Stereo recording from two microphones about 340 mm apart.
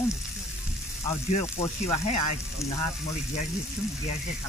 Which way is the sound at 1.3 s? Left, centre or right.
Centre.